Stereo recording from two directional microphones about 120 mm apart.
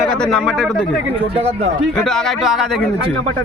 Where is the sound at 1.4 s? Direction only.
60° right (ahead or behind).